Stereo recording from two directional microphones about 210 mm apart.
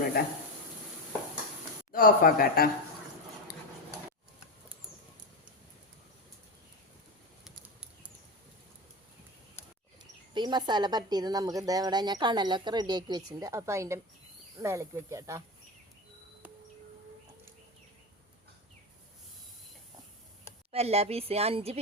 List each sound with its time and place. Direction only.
0.2 s speech: 45° left (ahead or behind)
1.9 s speech: 45° left (ahead or behind)
7.4 s a sound: 5° right (ahead or behind)
10.3 s a woman's voice: 20° right (ahead or behind)
20.7 s a woman's voice: 30° right (ahead or behind)